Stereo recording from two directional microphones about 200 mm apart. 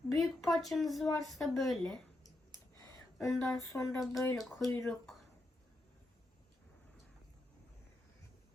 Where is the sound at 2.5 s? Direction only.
15° left (ahead or behind).